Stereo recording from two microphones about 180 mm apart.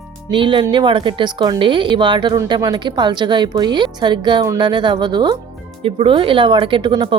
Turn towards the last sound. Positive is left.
turn(degrees=-25)  # may be behind; listen again after turning